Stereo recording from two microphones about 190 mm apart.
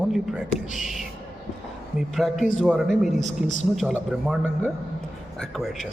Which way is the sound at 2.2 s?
Centre (ahead or behind).